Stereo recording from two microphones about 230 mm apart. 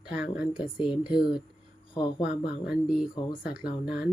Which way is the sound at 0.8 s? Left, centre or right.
Centre.